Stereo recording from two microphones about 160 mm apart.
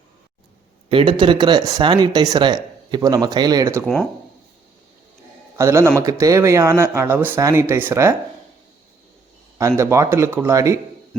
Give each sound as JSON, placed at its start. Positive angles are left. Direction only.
{"t": 0.9, "sound": "speech", "side_deg": -35}
{"t": 5.5, "sound": "speech", "side_deg": -20}
{"t": 9.6, "sound": "speech", "side_deg": -20}